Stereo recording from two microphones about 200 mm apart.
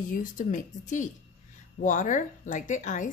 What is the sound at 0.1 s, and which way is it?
A woman's voice, 40° left (ahead or behind).